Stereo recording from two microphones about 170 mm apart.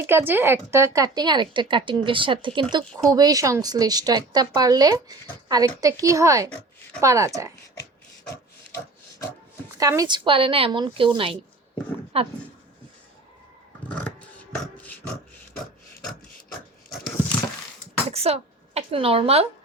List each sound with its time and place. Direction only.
0.0 s a woman's voice: 15° right (ahead or behind)
8.7 s pig: 20° left (ahead or behind)
9.7 s a woman's voice: 20° right (ahead or behind); by 12.3 s 35° right (ahead or behind)
13.8 s a sound: 10° left (ahead or behind)
18.1 s speech: 35° right (ahead or behind)